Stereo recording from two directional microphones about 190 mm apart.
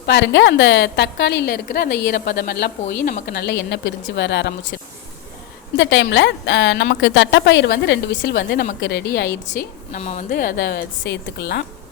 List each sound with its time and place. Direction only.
0.0 s a woman's voice: 65° left (ahead or behind)
5.7 s a woman's voice: 70° left (ahead or behind)
9.5 s a woman's voice: 40° left (ahead or behind); by 11.6 s 60° left (ahead or behind)